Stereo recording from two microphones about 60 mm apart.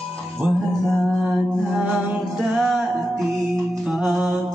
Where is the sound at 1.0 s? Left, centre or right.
Centre.